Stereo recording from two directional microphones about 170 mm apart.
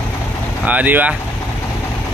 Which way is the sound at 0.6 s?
10° right (ahead or behind).